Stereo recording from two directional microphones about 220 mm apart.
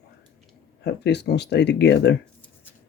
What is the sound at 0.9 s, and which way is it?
Speech, 50° left (ahead or behind).